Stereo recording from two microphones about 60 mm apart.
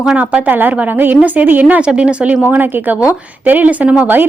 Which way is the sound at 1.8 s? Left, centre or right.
Centre.